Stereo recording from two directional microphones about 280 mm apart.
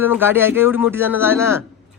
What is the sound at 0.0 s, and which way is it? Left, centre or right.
Speech, centre.